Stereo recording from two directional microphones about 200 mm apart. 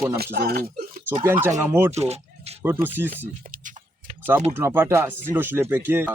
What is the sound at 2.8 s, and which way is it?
Speech, 10° right (ahead or behind).